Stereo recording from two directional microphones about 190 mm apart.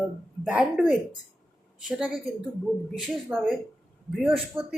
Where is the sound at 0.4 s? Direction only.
5° right (ahead or behind).